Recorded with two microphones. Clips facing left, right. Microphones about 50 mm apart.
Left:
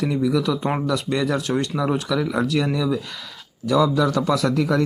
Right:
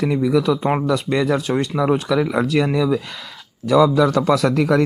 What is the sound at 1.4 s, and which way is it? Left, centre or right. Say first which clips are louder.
Speech: right 2 dB; right.